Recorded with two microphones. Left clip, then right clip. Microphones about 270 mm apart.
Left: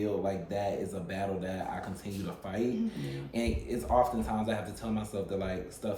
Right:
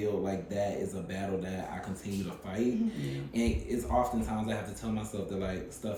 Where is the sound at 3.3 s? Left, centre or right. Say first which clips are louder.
Right 1 dB; centre.